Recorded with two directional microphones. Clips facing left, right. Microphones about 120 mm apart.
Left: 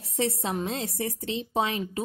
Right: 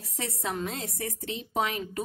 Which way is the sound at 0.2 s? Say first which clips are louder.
Left 5 dB; 25° left (ahead or behind).